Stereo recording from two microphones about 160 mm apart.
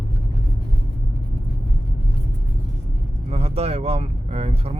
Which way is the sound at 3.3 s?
40° right (ahead or behind).